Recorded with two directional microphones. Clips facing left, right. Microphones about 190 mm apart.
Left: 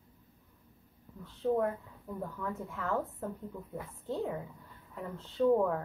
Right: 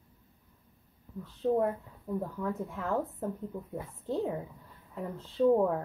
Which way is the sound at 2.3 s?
20° right (ahead or behind).